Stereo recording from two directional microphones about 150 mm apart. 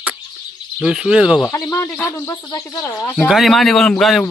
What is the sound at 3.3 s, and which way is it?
A man's voice, centre (ahead or behind).